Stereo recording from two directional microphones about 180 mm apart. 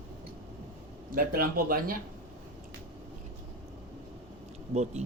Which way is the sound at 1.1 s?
55° right (ahead or behind).